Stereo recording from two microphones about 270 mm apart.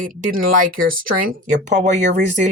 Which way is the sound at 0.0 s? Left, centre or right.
Right.